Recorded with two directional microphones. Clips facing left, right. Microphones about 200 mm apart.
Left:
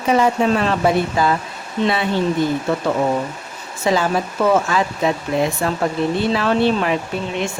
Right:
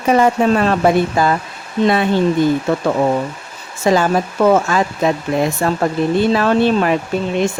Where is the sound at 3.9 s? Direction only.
50° right (ahead or behind).